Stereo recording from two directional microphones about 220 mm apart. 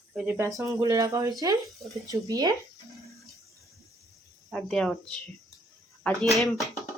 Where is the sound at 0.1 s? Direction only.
5° right (ahead or behind).